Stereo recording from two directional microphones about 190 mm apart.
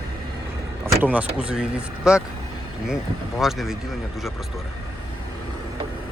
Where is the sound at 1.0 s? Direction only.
5° right (ahead or behind).